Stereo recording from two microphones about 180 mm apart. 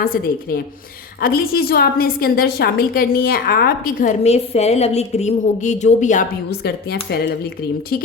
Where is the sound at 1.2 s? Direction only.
55° left (ahead or behind).